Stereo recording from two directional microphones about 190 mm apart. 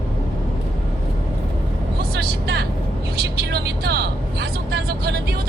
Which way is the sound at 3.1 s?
55° right (ahead or behind).